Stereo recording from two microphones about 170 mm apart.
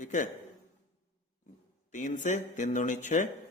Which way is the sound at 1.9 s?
45° left (ahead or behind).